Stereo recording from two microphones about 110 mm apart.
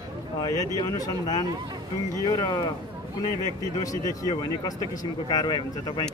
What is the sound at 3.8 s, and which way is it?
Speech, 35° left (ahead or behind).